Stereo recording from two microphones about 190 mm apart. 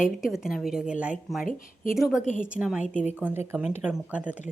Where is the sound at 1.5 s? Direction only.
45° left (ahead or behind).